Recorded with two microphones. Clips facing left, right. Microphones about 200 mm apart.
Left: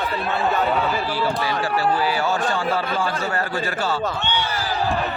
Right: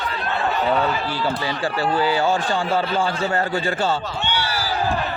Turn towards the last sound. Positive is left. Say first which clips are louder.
# even
turn(degrees=0)  # may be behind; listen again after turning